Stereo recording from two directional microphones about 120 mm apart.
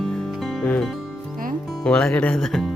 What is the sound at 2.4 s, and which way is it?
Speech, centre (ahead or behind).